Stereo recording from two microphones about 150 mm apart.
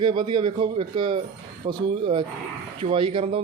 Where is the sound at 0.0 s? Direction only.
30° right (ahead or behind).